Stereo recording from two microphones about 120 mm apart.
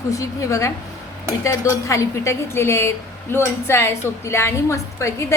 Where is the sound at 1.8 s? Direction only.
25° left (ahead or behind).